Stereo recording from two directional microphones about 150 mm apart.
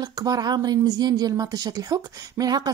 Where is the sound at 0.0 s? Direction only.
25° right (ahead or behind).